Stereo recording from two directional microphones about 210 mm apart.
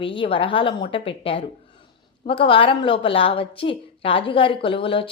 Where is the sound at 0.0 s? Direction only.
25° left (ahead or behind).